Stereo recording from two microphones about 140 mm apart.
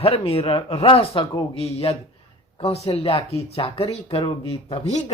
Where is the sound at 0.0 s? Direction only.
45° left (ahead or behind).